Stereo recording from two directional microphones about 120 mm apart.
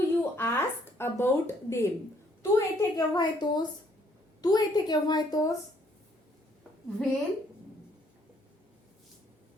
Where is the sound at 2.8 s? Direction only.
35° left (ahead or behind).